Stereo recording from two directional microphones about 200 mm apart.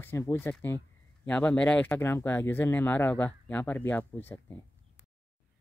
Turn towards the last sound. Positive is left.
turn(degrees=10)  # may be behind; listen again after turning